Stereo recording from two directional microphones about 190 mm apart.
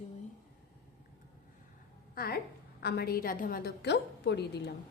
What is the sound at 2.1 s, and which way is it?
A woman's voice, 50° left (ahead or behind).